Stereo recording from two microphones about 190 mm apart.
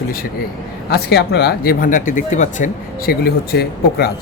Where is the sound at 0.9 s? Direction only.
60° left (ahead or behind).